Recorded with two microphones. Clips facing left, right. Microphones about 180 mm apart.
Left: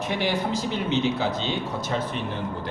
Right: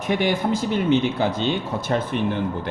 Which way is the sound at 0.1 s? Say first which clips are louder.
Right 6 dB; 50° right (ahead or behind).